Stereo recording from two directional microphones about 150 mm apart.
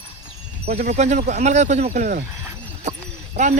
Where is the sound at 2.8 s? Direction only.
50° right (ahead or behind).